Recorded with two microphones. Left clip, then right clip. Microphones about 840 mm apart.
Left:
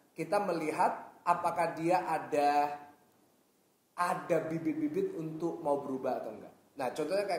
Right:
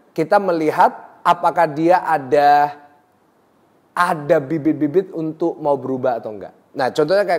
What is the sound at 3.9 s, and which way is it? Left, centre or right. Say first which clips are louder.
A woman's voice: right 15 dB; right.